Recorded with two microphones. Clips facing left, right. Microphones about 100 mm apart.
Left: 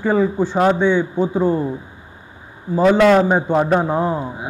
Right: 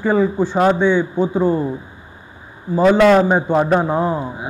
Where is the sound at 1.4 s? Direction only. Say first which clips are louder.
Right 1 dB; 55° right (ahead or behind).